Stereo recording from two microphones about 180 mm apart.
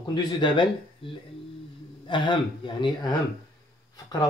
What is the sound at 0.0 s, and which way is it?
Speech, 25° left (ahead or behind).